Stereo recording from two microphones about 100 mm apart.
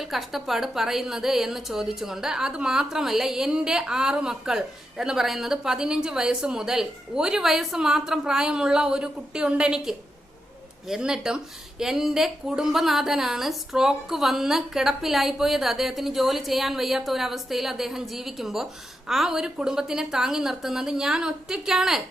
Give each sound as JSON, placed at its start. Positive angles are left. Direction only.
{"t": 0.0, "sound": "a woman's voice", "side_deg": 0}